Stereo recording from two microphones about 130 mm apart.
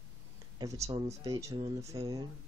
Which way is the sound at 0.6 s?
25° right (ahead or behind).